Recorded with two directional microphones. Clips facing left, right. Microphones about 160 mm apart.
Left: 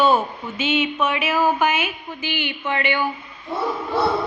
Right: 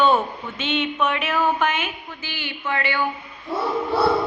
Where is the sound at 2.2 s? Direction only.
20° left (ahead or behind).